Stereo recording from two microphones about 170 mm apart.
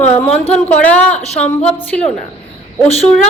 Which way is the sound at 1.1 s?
40° left (ahead or behind).